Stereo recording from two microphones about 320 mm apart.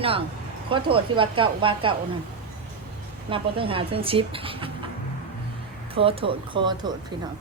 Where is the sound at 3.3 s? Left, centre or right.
Centre.